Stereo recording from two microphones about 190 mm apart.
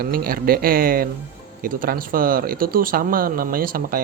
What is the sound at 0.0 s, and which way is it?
Speech, 50° right (ahead or behind).